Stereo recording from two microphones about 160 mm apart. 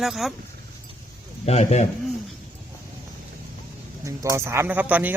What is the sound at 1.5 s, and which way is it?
Speech, 40° left (ahead or behind).